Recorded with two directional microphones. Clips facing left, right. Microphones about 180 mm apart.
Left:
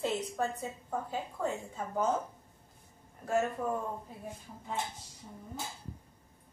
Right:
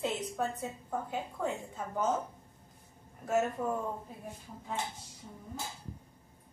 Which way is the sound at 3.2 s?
5° right (ahead or behind).